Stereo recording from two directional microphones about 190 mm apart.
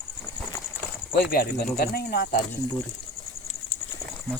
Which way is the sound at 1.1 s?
50° left (ahead or behind).